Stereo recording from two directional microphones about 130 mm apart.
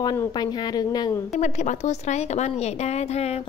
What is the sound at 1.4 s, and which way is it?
A woman's voice, 70° left (ahead or behind).